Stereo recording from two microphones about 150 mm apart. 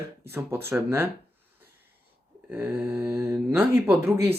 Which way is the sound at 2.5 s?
10° right (ahead or behind).